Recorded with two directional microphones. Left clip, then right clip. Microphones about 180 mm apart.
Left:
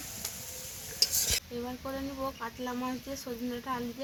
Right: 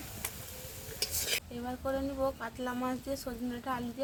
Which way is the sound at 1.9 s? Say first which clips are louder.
Right 6 dB; 20° right (ahead or behind).